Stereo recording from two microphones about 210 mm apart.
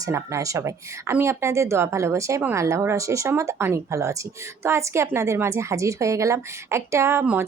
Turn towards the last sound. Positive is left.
turn(degrees=-10)  # may be behind; listen again after turning